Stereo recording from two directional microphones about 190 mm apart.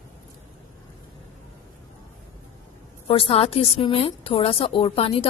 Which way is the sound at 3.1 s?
30° left (ahead or behind).